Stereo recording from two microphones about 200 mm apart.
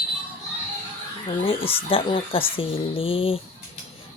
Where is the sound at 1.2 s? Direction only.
30° left (ahead or behind).